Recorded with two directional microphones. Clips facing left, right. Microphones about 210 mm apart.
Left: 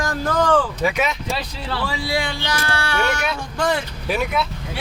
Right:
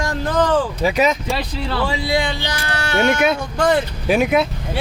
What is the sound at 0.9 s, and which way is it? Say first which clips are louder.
Speech: right 6 dB; 40° right (ahead or behind).